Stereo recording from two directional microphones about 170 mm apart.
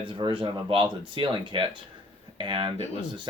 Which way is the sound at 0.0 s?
30° right (ahead or behind).